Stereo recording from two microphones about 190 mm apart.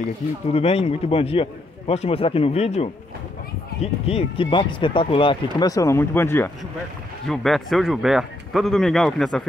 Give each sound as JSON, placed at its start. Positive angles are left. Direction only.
{"t": 0.5, "sound": "a man's voice", "side_deg": 30}
{"t": 7.2, "sound": "speech", "side_deg": 0}